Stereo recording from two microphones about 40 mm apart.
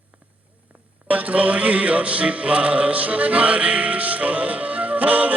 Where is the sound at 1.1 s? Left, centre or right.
Right.